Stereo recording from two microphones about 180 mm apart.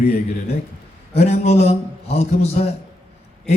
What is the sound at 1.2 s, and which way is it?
A man's voice, 35° left (ahead or behind).